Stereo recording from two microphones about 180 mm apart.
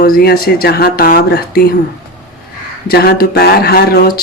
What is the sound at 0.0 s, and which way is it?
Speech, 55° left (ahead or behind).